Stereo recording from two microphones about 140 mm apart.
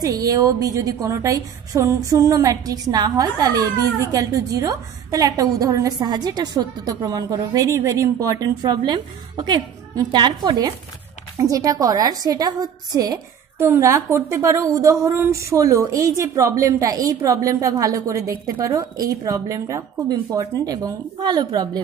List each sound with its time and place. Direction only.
0.0 s a woman's voice: 25° right (ahead or behind)